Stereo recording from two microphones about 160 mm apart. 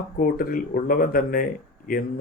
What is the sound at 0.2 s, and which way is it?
Speech, 65° left (ahead or behind).